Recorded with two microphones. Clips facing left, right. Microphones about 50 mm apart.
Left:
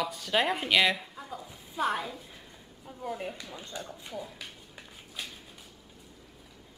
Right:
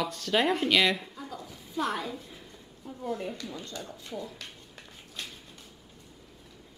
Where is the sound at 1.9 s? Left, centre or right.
Centre.